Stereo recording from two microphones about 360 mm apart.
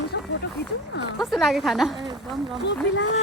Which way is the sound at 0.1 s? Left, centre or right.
Left.